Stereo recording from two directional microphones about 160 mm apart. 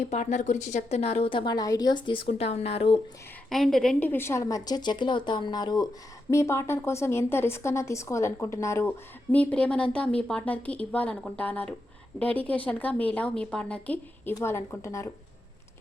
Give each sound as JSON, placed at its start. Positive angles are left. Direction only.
{"t": 0.0, "sound": "a woman's voice", "side_deg": 45}
{"t": 3.5, "sound": "a woman's voice", "side_deg": 0}